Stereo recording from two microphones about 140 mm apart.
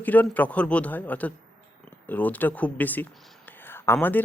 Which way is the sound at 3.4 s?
15° left (ahead or behind).